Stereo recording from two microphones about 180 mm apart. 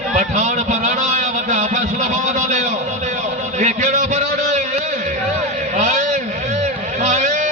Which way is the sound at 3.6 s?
40° right (ahead or behind).